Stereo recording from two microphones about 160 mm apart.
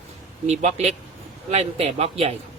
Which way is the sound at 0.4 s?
45° right (ahead or behind).